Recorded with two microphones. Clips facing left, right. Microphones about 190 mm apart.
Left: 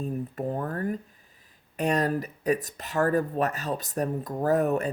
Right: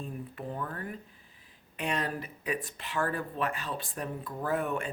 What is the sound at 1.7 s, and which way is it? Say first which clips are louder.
Speech: left 8 dB; 40° left (ahead or behind).